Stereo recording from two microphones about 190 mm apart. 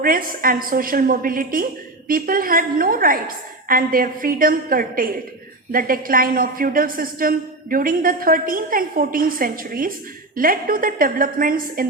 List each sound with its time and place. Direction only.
0.0 s a woman's voice: 50° right (ahead or behind)